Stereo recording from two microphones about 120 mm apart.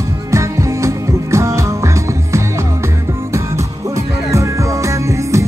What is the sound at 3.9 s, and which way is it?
Music, 25° right (ahead or behind).